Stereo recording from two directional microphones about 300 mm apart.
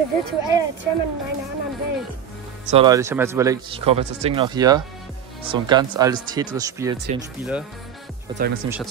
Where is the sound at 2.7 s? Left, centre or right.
Centre.